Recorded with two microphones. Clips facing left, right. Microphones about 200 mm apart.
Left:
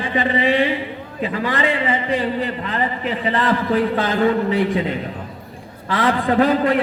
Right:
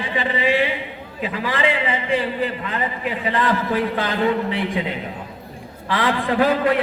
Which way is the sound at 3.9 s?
45° left (ahead or behind).